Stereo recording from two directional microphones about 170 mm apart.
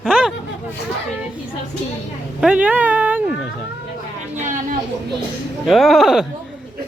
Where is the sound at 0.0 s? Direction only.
5° right (ahead or behind).